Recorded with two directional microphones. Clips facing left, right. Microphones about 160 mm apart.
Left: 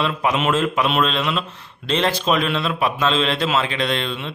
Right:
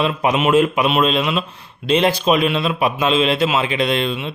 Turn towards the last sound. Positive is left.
turn(degrees=-10)  # may be behind; listen again after turning